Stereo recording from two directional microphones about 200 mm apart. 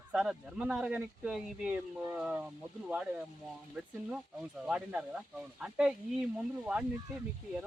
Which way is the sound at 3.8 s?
5° right (ahead or behind).